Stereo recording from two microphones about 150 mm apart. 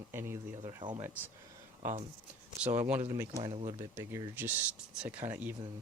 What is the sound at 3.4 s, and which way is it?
Speech, 30° right (ahead or behind).